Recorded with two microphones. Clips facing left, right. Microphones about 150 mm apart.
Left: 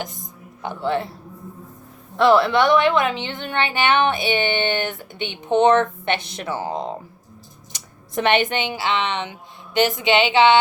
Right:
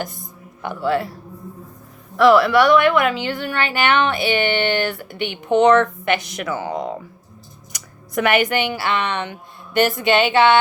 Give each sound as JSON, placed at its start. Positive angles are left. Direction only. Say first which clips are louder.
{"t": 0.0, "sound": "music", "louder": "right 2 dB", "side_deg": 20}
{"t": 0.8, "sound": "a woman's voice", "louder": "right 3 dB", "side_deg": 25}
{"t": 2.1, "sound": "a woman's voice", "louder": "right 3 dB", "side_deg": 25}